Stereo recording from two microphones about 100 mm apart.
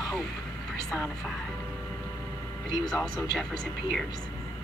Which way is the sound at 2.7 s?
5° left (ahead or behind).